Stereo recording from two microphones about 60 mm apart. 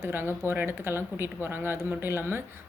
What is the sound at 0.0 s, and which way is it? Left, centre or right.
Speech, right.